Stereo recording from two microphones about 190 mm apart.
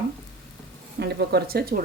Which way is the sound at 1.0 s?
60° right (ahead or behind).